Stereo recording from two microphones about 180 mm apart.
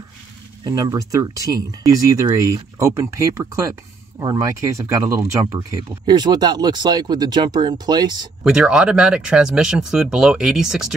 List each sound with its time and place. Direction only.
0.7 s speech: 20° right (ahead or behind)
8.5 s speech: 5° right (ahead or behind)